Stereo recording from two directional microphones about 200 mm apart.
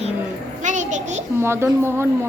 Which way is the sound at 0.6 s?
40° right (ahead or behind).